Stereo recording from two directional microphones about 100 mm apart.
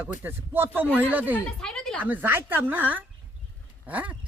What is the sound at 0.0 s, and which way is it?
Speech, 20° right (ahead or behind).